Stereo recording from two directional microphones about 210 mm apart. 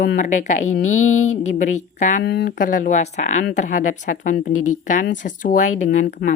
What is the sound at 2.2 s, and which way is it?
Speech, 55° left (ahead or behind).